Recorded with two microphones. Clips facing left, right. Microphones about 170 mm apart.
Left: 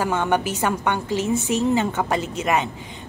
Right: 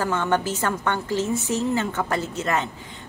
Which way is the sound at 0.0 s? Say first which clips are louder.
Left 2 dB; 15° left (ahead or behind).